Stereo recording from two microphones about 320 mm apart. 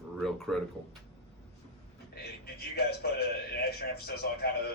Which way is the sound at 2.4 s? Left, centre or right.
Left.